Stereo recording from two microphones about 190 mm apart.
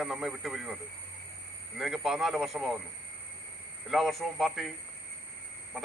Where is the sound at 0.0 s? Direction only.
Centre (ahead or behind).